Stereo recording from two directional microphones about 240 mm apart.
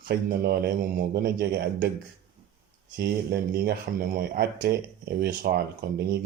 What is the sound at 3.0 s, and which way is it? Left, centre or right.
Speech, right.